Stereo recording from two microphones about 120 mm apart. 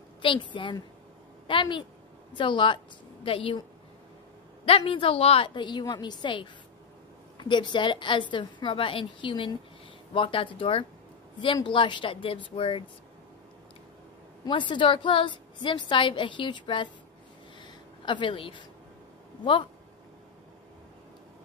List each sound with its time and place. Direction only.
0.2 s a woman's voice: 45° left (ahead or behind)
4.6 s a woman's voice: 50° left (ahead or behind)
5.5 s a woman's voice: 40° left (ahead or behind)
14.4 s a woman's voice: 40° left (ahead or behind)
17.6 s a sound: 40° left (ahead or behind)